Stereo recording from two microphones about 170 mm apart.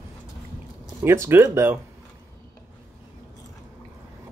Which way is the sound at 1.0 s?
15° right (ahead or behind).